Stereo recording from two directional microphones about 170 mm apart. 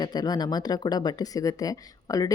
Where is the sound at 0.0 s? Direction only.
25° left (ahead or behind).